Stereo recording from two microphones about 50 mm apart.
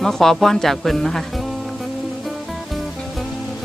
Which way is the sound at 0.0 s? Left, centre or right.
Centre.